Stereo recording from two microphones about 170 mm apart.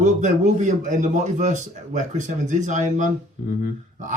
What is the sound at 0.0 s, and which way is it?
A man's voice, 45° right (ahead or behind).